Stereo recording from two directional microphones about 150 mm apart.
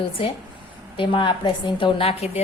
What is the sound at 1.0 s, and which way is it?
A woman's voice, 35° left (ahead or behind).